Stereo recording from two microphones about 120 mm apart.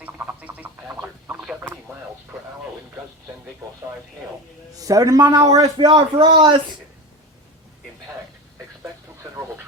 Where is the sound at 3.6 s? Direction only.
25° right (ahead or behind).